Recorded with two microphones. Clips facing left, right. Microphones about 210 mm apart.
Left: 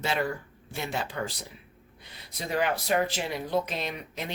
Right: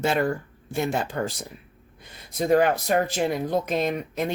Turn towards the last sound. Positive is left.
turn(degrees=-50)  # may be behind; listen again after turning